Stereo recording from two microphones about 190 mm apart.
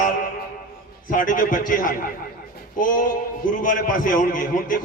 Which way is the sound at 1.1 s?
45° left (ahead or behind).